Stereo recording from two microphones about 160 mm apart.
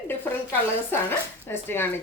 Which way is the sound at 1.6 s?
15° left (ahead or behind).